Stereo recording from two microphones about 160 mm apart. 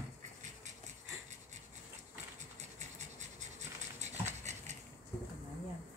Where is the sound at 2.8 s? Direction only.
45° right (ahead or behind).